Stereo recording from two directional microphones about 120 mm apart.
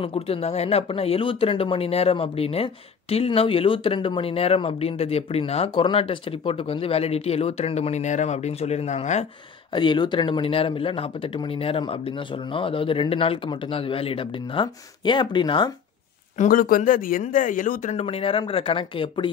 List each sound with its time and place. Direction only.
0.0 s speech: 55° left (ahead or behind); by 9.3 s 70° left (ahead or behind)
9.7 s speech: 40° left (ahead or behind)
16.4 s speech: 80° left
18.0 s speech: 50° left (ahead or behind)